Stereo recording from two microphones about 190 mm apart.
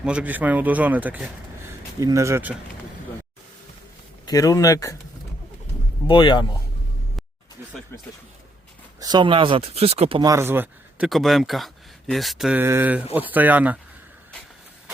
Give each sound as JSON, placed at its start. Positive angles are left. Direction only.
{"t": 0.0, "sound": "speech", "side_deg": -5}
{"t": 4.3, "sound": "speech", "side_deg": 20}
{"t": 6.1, "sound": "speech", "side_deg": 25}
{"t": 9.0, "sound": "speech", "side_deg": -20}